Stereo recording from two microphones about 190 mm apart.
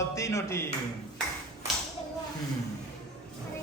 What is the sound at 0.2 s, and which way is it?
Speech, 15° left (ahead or behind).